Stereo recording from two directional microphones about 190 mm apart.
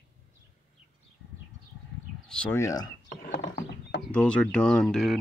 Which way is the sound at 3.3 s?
65° left (ahead or behind).